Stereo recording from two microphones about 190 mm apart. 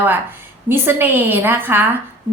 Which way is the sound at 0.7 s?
10° right (ahead or behind).